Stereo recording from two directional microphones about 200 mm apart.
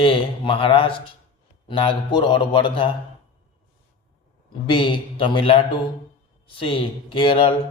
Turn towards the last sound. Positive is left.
turn(degrees=25)  # may be behind; listen again after turning